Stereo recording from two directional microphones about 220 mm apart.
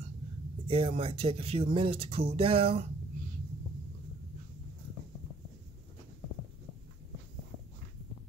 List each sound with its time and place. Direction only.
0.7 s speech: 25° right (ahead or behind)